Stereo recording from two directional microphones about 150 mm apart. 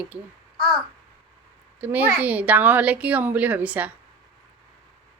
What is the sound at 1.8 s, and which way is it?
A woman's voice, 10° right (ahead or behind).